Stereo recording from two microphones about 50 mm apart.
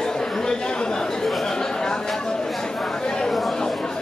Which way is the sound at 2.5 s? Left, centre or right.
Centre.